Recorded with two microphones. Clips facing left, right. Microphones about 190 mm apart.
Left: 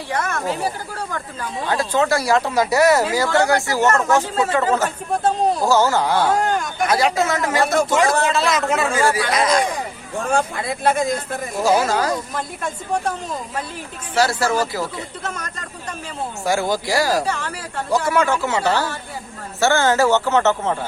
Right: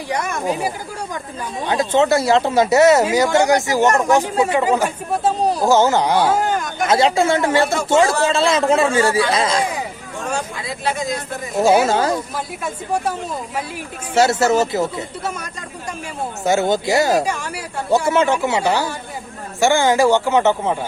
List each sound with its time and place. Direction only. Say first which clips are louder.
0.1 s speech: right 2 dB; 15° right (ahead or behind)
5.6 s speech: right 4 dB; 20° right (ahead or behind)
6.2 s speech: right 1 dB; 5° right (ahead or behind)
6.8 s speech: right 3 dB; 25° right (ahead or behind)
10.2 s speech: left 4 dB; 55° left (ahead or behind)
11.5 s speech: right 4 dB; 25° right (ahead or behind)
12.6 s speech: right 1 dB; 5° right (ahead or behind)
14.2 s speech: right 4 dB; 25° right (ahead or behind)
16.4 s speech: right 4 dB; 20° right (ahead or behind)